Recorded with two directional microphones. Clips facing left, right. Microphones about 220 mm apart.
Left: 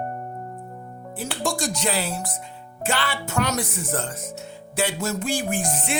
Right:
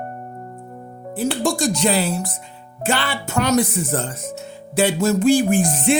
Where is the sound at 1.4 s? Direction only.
25° right (ahead or behind).